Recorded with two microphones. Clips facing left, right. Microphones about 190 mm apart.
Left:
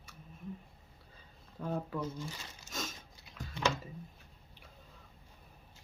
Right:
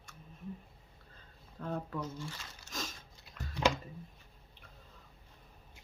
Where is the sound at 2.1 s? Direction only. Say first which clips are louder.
Left 1 dB; 15° left (ahead or behind).